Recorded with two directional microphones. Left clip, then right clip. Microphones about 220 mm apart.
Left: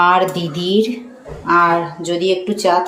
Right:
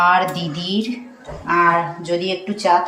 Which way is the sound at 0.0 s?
15° left (ahead or behind).